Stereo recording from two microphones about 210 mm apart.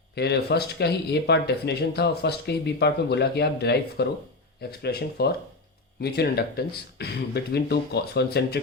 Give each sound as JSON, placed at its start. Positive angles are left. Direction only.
{"t": 0.2, "sound": "speech", "side_deg": 50}